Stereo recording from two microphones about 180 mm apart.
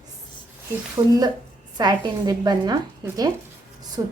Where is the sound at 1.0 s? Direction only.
25° right (ahead or behind).